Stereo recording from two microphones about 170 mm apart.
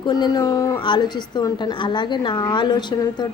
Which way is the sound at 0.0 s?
25° left (ahead or behind).